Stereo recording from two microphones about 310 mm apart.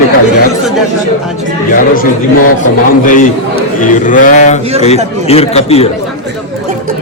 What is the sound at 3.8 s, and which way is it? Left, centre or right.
Speech, left.